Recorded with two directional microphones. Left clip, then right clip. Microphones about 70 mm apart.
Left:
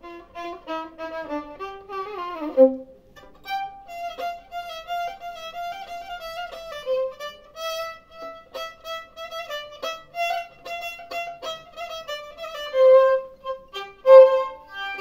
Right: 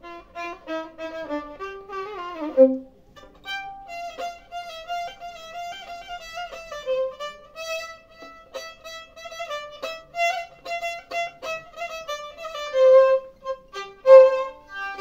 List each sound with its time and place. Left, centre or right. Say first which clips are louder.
0.0 s music: right 1 dB; left
4.1 s violin: left 2 dB; left
9.8 s music: right 2 dB; left